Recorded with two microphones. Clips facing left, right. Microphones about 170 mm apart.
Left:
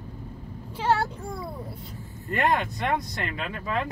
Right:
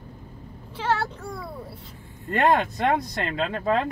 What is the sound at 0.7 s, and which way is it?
Speech, 10° left (ahead or behind).